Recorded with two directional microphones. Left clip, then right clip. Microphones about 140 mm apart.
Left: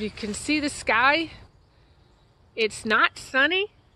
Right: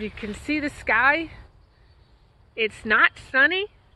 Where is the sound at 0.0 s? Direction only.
30° left (ahead or behind).